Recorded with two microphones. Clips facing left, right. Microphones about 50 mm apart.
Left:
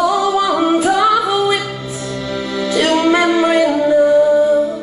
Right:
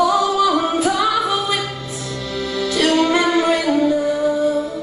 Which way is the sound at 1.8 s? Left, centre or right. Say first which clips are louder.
Left 4 dB; centre.